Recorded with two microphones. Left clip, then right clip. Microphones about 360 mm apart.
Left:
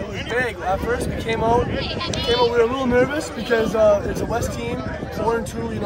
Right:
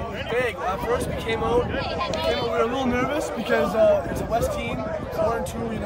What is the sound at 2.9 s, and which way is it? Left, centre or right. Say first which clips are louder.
Speech: left 5 dB; centre.